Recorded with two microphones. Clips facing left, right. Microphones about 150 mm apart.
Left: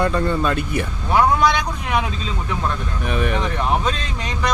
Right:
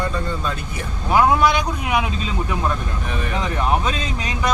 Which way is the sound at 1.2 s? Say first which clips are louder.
Even; 10° right (ahead or behind).